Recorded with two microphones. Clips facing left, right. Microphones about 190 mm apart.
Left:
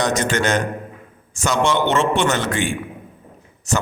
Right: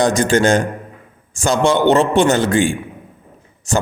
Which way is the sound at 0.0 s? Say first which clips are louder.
Right 6 dB; 30° right (ahead or behind).